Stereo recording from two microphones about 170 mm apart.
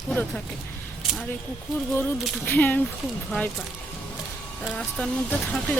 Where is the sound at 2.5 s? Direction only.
10° left (ahead or behind).